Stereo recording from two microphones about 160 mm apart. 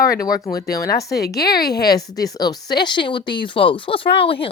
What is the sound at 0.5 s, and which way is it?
Speech, 20° left (ahead or behind).